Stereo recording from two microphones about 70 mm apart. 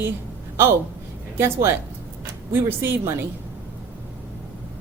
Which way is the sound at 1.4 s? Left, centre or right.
Right.